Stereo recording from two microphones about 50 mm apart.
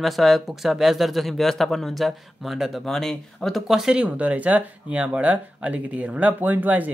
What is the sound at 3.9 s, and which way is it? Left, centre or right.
Speech, right.